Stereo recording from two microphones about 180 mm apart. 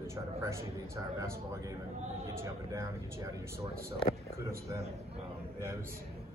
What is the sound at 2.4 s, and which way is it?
Speech, 15° right (ahead or behind).